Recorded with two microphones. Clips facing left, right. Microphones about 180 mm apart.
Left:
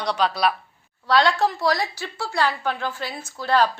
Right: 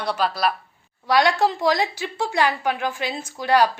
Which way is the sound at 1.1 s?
15° right (ahead or behind).